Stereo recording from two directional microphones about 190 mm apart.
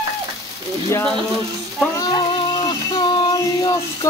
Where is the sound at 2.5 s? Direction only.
25° left (ahead or behind).